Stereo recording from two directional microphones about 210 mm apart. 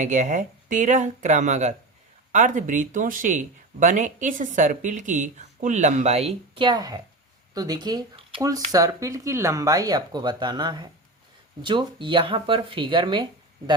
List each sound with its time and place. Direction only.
0.0 s speech: 35° right (ahead or behind)